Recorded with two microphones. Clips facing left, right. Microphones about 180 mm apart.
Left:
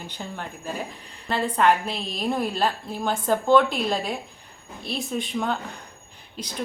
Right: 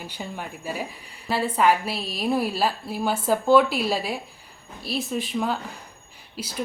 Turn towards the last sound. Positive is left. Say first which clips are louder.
# right 1 dB
turn(degrees=-5)  # may be behind; listen again after turning